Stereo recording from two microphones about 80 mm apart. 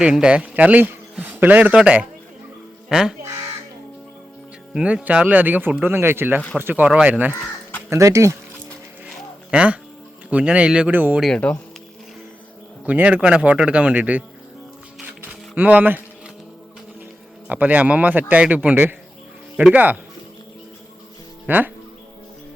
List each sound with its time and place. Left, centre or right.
0.0 s a man's voice: centre
4.7 s a man's voice: centre; by 6.8 s right
6.8 s a man's voice: centre
7.9 s speech: right
9.5 s a man's voice: centre
10.9 s a man's voice: right
11.4 s speech: centre
12.8 s a man's voice: centre
15.5 s a man's voice: right
17.5 s a man's voice: right
21.4 s speech: right